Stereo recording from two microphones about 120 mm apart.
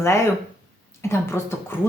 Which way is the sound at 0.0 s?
20° left (ahead or behind).